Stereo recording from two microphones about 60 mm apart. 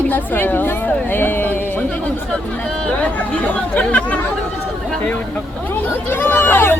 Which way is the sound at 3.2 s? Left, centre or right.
Left.